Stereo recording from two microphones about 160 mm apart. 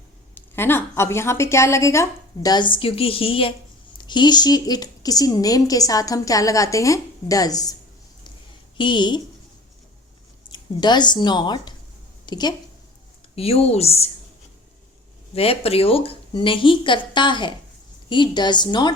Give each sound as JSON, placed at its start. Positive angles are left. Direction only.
{"t": 0.3, "sound": "a woman's voice", "side_deg": 15}
{"t": 8.8, "sound": "a woman's voice", "side_deg": 30}
{"t": 10.5, "sound": "a woman's voice", "side_deg": 25}
{"t": 13.3, "sound": "speech", "side_deg": 40}
{"t": 15.4, "sound": "a woman's voice", "side_deg": 40}